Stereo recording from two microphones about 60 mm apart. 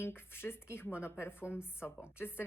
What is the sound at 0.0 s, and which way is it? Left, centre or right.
Speech, left.